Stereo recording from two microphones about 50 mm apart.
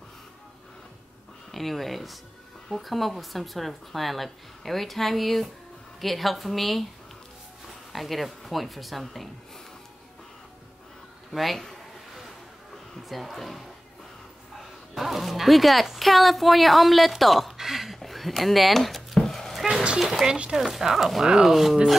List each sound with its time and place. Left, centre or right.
1.5 s speech: centre
7.9 s speech: centre
11.3 s speech: centre
13.1 s speech: centre
15.0 s speech: centre
20.0 s speech: centre